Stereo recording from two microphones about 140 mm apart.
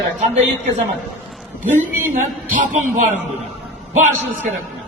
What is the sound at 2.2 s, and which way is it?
A man's voice, 70° right (ahead or behind).